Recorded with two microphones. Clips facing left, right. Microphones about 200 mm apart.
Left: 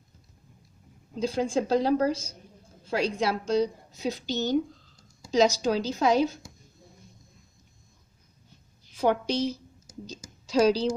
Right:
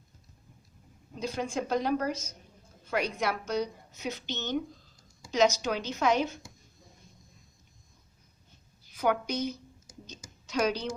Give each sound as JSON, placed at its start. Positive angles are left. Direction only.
{"t": 1.1, "sound": "a woman's voice", "side_deg": 30}
{"t": 9.0, "sound": "a woman's voice", "side_deg": 30}
{"t": 10.1, "sound": "a sound", "side_deg": 30}